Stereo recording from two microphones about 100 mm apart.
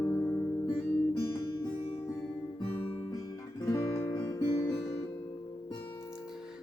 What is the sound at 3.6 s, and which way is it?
Music, 35° left (ahead or behind).